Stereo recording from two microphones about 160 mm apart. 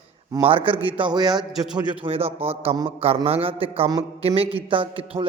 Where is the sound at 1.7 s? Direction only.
30° right (ahead or behind).